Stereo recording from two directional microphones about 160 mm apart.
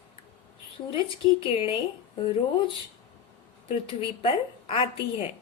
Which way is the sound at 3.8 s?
35° left (ahead or behind).